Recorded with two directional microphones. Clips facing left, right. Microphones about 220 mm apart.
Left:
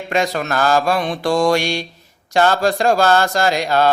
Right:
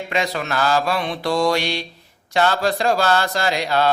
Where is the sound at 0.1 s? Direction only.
45° left (ahead or behind).